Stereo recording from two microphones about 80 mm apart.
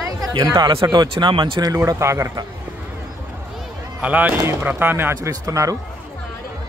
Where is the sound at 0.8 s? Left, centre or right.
Right.